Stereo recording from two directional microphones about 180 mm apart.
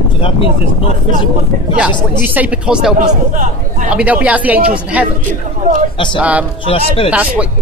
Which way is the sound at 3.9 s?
5° right (ahead or behind).